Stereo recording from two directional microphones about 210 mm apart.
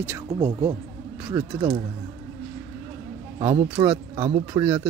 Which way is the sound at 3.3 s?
20° right (ahead or behind).